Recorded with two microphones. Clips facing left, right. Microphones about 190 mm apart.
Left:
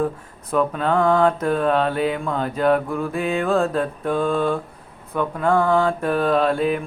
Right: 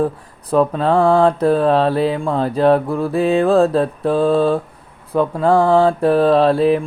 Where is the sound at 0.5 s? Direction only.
35° right (ahead or behind).